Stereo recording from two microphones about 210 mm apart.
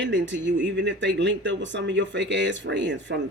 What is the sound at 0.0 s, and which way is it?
Speech, 60° right (ahead or behind).